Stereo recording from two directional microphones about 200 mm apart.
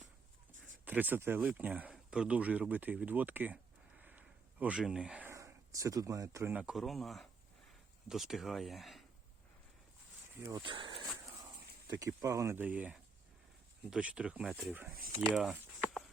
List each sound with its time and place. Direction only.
0.9 s speech: 10° right (ahead or behind)
10.4 s speech: 20° right (ahead or behind)
11.9 s speech: 15° right (ahead or behind)
15.3 s a sound: centre (ahead or behind)